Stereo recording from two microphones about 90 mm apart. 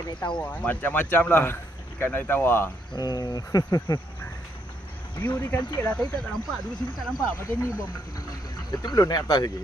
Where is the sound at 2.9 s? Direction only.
50° left (ahead or behind).